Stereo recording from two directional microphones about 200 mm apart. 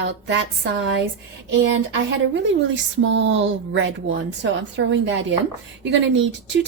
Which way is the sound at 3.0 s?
65° right (ahead or behind).